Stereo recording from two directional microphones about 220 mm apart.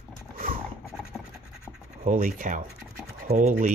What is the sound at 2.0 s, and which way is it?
Speech, 35° right (ahead or behind).